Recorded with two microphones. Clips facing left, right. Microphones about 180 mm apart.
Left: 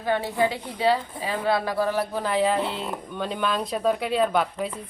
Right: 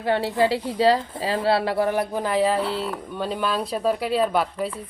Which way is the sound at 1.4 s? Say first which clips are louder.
Right 2 dB; 30° right (ahead or behind).